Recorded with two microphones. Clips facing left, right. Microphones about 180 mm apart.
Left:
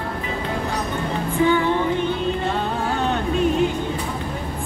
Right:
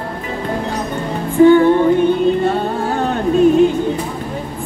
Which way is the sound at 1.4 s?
50° right (ahead or behind).